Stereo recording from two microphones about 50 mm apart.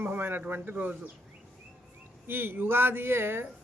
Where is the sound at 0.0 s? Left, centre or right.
Right.